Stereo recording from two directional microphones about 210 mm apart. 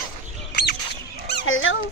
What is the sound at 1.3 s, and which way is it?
Dog, 60° left (ahead or behind).